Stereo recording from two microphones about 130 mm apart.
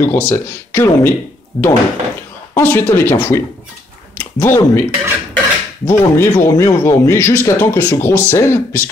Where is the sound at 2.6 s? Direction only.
15° left (ahead or behind).